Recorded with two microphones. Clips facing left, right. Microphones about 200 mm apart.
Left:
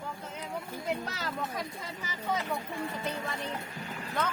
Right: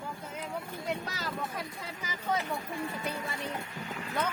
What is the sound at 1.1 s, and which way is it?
Speech, centre (ahead or behind).